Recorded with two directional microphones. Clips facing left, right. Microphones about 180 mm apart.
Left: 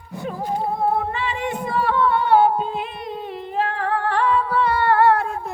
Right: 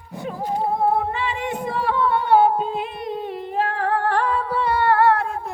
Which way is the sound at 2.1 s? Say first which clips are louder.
Right 1 dB; 45° right (ahead or behind).